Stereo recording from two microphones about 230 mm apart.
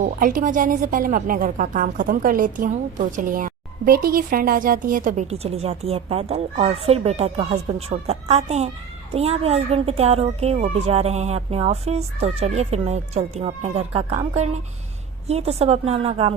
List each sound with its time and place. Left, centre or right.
0.0 s speech: right